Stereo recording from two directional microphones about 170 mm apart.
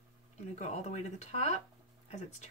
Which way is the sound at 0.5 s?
40° left (ahead or behind).